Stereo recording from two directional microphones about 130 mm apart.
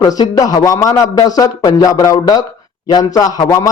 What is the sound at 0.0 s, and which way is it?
A man's voice, 30° left (ahead or behind).